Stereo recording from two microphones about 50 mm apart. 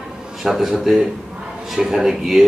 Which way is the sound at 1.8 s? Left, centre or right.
Centre.